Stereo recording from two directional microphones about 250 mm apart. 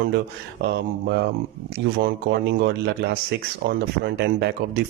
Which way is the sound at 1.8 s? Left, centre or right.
Right.